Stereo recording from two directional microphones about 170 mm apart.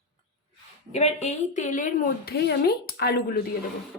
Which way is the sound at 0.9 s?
40° left (ahead or behind).